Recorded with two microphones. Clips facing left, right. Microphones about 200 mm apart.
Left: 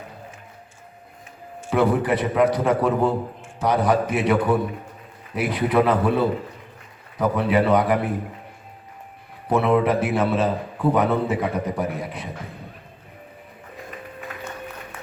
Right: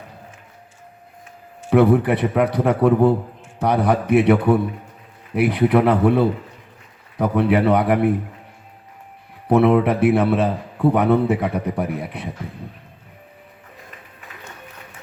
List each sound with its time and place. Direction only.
1.7 s a man's voice: 60° right (ahead or behind)
9.5 s a man's voice: 60° right (ahead or behind)